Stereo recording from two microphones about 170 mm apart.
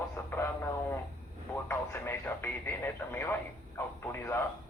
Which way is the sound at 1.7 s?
15° left (ahead or behind).